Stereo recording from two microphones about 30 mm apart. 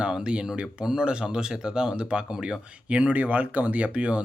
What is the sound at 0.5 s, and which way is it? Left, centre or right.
Speech, right.